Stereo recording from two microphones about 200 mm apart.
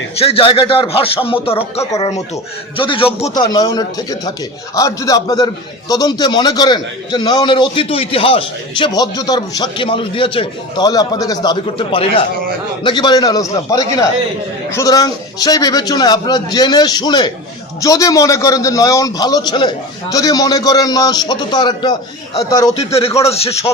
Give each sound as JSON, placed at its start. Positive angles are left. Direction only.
{"t": 0.2, "sound": "a man's voice", "side_deg": 30}
{"t": 1.8, "sound": "a man's voice", "side_deg": 15}
{"t": 3.5, "sound": "a man's voice", "side_deg": 20}